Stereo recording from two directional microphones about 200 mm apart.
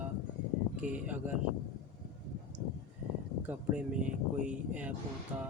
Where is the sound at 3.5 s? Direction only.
5° right (ahead or behind).